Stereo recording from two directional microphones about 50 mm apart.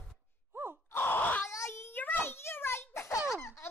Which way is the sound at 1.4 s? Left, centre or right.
Left.